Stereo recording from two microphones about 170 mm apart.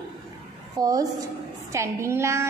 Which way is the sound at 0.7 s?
20° right (ahead or behind).